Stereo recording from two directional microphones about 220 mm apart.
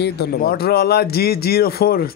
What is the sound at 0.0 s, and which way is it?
A man's voice, 45° left (ahead or behind).